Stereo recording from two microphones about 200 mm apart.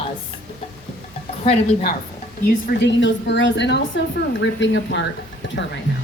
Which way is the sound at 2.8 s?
60° left (ahead or behind).